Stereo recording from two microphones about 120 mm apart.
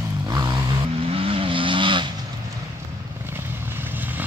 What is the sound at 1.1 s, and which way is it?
Vehicle, 50° right (ahead or behind).